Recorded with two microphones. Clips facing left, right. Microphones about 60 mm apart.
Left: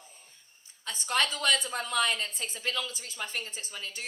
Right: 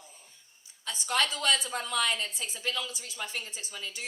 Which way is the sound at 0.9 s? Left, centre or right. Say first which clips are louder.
Even; left.